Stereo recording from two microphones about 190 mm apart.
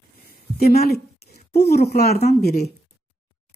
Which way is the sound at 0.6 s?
55° left (ahead or behind).